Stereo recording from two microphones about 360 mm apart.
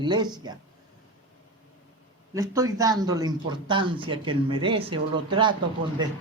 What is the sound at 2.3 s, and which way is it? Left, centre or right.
A man's voice, centre.